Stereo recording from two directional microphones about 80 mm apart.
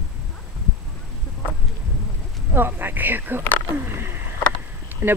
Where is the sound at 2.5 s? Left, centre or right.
Right.